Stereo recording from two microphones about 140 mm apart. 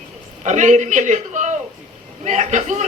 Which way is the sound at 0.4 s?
60° right (ahead or behind).